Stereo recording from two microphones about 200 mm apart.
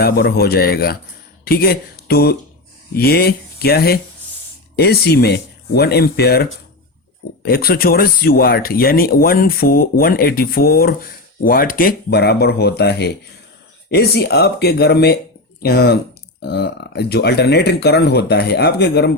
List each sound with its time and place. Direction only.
0.0 s speech: 55° left (ahead or behind)